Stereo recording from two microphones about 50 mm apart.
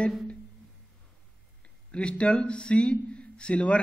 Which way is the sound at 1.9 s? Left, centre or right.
Left.